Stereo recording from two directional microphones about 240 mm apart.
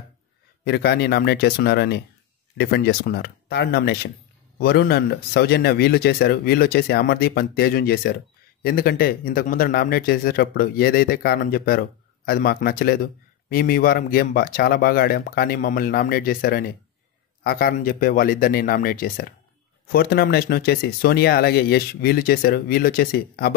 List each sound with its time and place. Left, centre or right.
0.7 s a man's voice: left